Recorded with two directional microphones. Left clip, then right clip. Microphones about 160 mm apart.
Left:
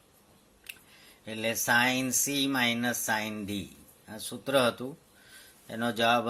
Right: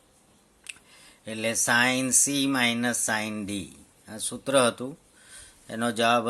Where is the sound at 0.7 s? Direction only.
35° right (ahead or behind).